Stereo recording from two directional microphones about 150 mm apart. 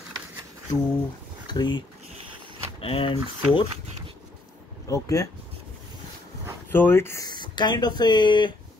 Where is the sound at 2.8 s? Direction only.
35° left (ahead or behind).